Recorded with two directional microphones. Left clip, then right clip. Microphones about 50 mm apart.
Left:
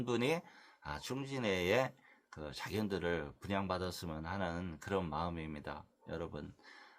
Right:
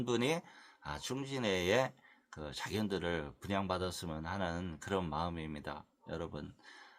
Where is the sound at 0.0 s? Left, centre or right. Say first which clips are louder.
Right 1 dB; right.